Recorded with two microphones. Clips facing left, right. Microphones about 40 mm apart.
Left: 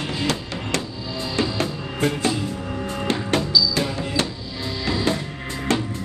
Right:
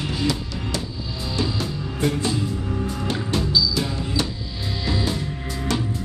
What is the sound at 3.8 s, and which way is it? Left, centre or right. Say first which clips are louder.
Music: left 2 dB; left.